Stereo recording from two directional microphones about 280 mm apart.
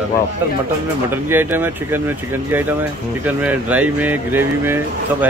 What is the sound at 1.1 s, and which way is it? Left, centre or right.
Speech, centre.